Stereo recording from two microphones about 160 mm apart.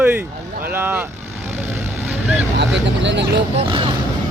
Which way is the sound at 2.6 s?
90° right.